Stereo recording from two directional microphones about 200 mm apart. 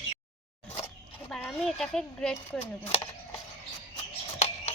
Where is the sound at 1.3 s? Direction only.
Centre (ahead or behind).